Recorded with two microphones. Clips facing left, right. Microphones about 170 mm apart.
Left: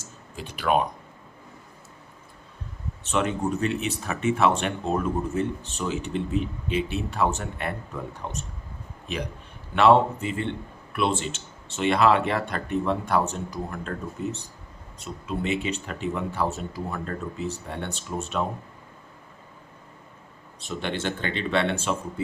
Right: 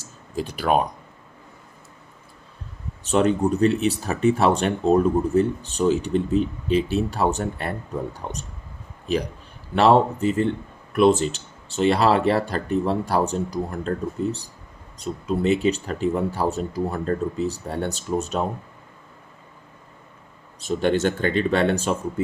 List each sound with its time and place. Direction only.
0.0 s a sound: 35° right (ahead or behind)
3.0 s speech: 35° right (ahead or behind)
9.7 s speech: 40° right (ahead or behind)
20.6 s speech: 40° right (ahead or behind)